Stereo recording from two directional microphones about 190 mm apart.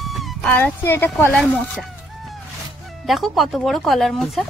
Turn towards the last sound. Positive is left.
turn(degrees=0)  # may be behind; listen again after turning